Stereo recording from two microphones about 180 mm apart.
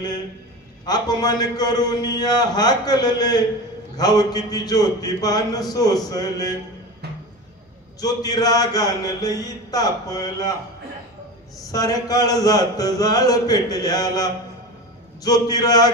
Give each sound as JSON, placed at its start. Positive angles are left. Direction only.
{"t": 0.8, "sound": "a man's voice", "side_deg": 20}
{"t": 8.0, "sound": "a man's voice", "side_deg": 20}
{"t": 11.7, "sound": "a man's voice", "side_deg": 20}